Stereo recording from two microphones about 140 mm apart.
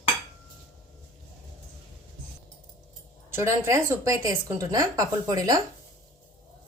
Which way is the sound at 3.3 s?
20° right (ahead or behind).